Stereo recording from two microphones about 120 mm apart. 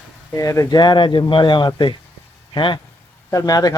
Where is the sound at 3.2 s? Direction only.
30° left (ahead or behind).